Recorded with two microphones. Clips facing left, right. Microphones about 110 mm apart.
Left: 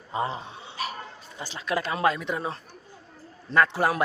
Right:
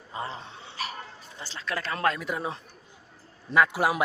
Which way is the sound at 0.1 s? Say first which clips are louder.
Left 6 dB; 20° left (ahead or behind).